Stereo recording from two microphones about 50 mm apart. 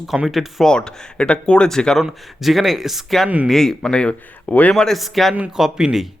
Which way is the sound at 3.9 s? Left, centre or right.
Centre.